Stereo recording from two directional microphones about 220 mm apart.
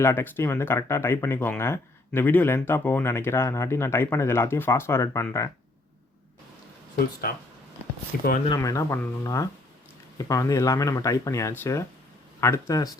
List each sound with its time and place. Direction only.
0.0 s speech: 10° left (ahead or behind)
8.1 s speech: 40° left (ahead or behind)
8.4 s speech: 15° left (ahead or behind)